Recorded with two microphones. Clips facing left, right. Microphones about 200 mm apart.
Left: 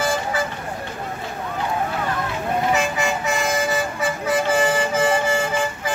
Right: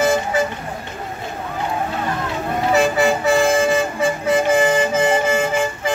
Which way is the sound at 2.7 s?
35° right (ahead or behind).